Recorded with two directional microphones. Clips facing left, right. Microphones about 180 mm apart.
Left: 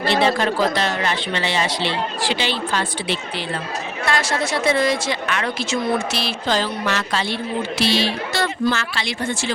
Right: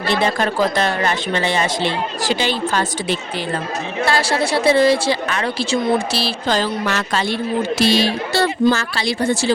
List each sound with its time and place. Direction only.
0.1 s speech: 45° right (ahead or behind)
4.0 s a woman's voice: 30° right (ahead or behind)
6.5 s speech: 45° right (ahead or behind)
8.3 s a woman's voice: 30° right (ahead or behind)